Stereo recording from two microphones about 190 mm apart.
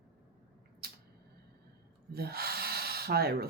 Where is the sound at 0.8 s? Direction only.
55° right (ahead or behind).